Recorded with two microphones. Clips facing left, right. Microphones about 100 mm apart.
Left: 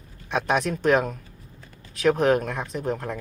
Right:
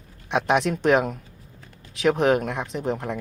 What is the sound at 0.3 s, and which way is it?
Speech, 20° right (ahead or behind).